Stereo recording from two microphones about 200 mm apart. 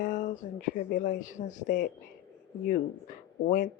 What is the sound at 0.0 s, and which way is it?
Speech, 40° left (ahead or behind).